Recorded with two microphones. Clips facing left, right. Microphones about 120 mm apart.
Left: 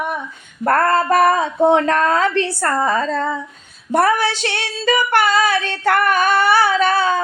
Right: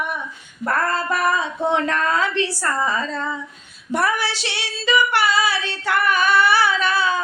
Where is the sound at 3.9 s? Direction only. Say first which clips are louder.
Left 6 dB; 45° left (ahead or behind).